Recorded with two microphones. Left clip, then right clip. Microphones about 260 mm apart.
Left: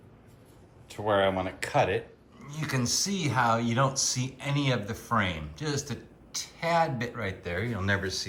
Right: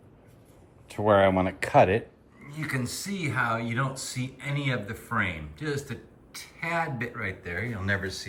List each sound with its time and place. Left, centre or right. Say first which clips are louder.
0.9 s speech: right 4 dB; right
2.4 s speech: even; centre